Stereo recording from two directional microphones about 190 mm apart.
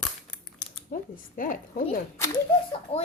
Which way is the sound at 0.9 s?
50° left (ahead or behind).